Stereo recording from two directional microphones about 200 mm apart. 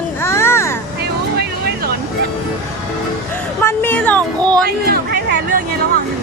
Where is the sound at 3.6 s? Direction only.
10° left (ahead or behind).